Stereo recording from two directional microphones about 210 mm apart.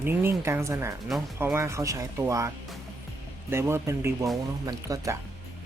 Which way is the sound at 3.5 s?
10° right (ahead or behind).